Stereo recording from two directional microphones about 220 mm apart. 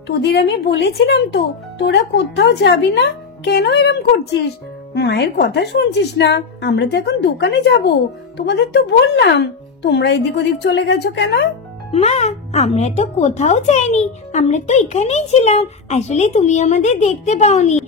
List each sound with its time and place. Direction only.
0.1 s a woman's voice: 50° left (ahead or behind)
11.9 s speech: 30° left (ahead or behind)